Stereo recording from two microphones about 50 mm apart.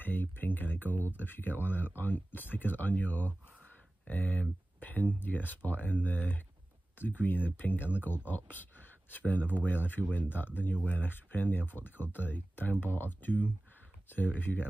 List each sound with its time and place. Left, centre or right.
0.0 s speech: left